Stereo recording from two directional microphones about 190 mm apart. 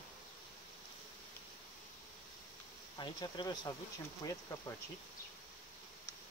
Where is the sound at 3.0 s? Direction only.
20° left (ahead or behind).